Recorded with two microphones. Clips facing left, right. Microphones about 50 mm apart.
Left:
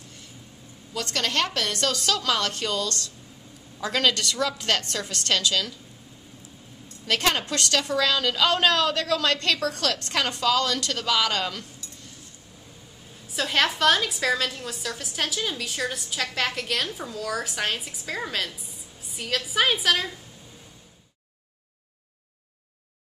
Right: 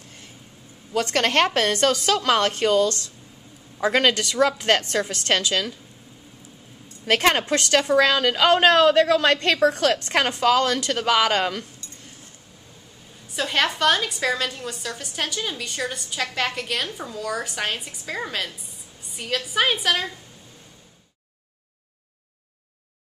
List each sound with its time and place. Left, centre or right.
0.9 s a woman's voice: right
7.1 s a woman's voice: right
11.3 s a woman's voice: centre
13.3 s a woman's voice: centre